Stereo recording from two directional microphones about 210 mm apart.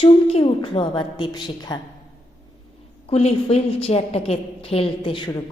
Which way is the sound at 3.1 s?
30° left (ahead or behind).